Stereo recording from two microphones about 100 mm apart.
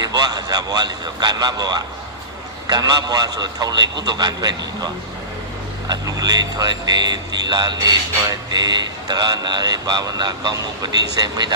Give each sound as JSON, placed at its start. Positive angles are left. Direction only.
{"t": 0.0, "sound": "speech", "side_deg": -45}
{"t": 5.9, "sound": "speech", "side_deg": -40}